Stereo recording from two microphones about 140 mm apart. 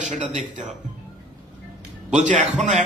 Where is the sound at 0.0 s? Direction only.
60° right (ahead or behind).